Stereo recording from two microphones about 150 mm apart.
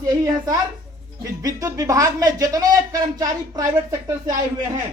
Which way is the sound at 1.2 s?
20° right (ahead or behind).